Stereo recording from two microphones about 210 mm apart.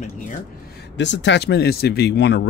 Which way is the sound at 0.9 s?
55° left (ahead or behind).